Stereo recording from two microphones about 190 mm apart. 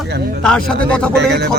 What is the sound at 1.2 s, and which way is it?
Speech, 60° right (ahead or behind).